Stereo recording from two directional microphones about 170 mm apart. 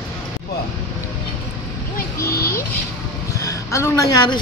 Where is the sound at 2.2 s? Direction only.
65° left (ahead or behind).